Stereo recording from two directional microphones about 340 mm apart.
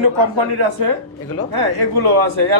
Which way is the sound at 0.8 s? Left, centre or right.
Right.